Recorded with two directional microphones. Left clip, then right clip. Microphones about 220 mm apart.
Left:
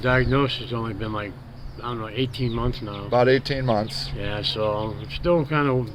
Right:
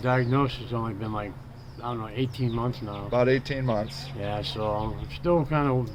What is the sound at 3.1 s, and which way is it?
Speech, 20° left (ahead or behind).